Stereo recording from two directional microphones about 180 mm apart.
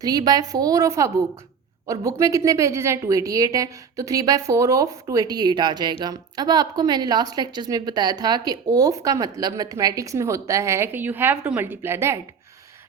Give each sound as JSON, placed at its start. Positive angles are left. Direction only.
{"t": 0.0, "sound": "a woman's voice", "side_deg": -20}